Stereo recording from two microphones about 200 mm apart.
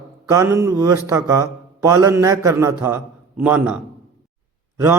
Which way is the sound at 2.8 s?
10° right (ahead or behind).